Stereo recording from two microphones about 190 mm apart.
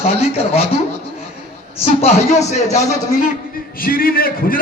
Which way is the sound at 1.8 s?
35° left (ahead or behind).